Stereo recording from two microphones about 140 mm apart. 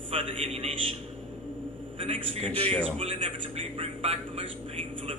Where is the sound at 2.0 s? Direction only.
45° right (ahead or behind).